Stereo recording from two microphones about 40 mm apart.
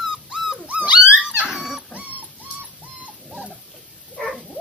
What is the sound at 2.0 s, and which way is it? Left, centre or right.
Dog, right.